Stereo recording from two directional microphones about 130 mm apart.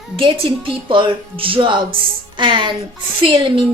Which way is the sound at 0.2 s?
40° right (ahead or behind).